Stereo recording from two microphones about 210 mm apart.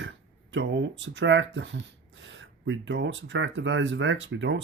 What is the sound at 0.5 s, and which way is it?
Speech, 60° right (ahead or behind).